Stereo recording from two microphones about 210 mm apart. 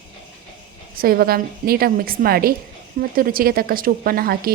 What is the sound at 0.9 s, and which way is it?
A woman's voice, 45° right (ahead or behind).